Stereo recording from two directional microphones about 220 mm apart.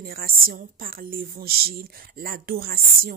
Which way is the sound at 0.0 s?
40° right (ahead or behind).